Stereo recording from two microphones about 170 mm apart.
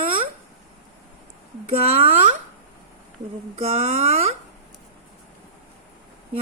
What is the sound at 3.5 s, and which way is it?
Speech, 35° right (ahead or behind).